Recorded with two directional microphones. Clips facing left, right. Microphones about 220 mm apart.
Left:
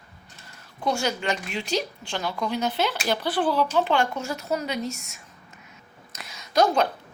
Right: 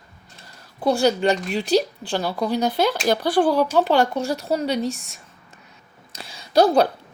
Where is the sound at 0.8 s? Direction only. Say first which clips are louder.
Right 8 dB; 35° right (ahead or behind).